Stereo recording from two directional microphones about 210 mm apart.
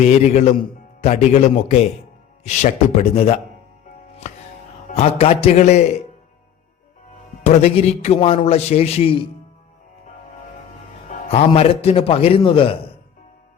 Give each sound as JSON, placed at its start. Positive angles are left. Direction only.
{"t": 0.0, "sound": "a man's voice", "side_deg": 30}
{"t": 4.9, "sound": "a man's voice", "side_deg": 30}
{"t": 7.4, "sound": "a man's voice", "side_deg": 30}
{"t": 11.3, "sound": "a man's voice", "side_deg": 30}